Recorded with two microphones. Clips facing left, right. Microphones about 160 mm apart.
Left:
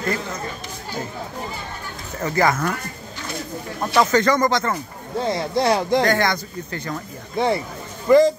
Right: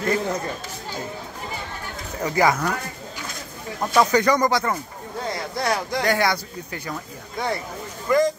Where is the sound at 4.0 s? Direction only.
15° right (ahead or behind).